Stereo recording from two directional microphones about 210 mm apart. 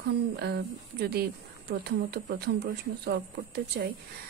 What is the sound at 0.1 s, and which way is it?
A woman's voice, 50° right (ahead or behind).